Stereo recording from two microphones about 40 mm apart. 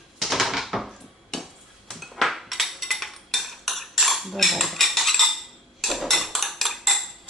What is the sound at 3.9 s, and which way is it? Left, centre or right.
Cutlery, centre.